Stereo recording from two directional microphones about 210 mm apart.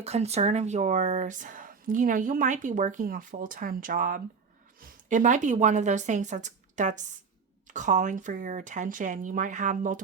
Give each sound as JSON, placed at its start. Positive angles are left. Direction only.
{"t": 0.0, "sound": "a woman's voice", "side_deg": -30}